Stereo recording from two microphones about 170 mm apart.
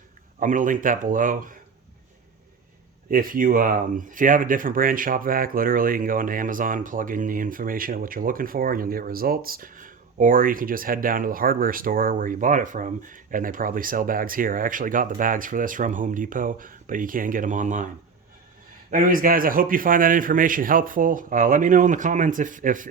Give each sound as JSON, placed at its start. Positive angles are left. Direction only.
{"t": 0.3, "sound": "speech", "side_deg": -50}
{"t": 3.1, "sound": "speech", "side_deg": -55}
{"t": 18.9, "sound": "speech", "side_deg": -50}